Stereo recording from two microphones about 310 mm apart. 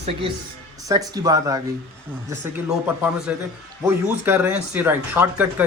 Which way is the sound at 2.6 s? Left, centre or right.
Centre.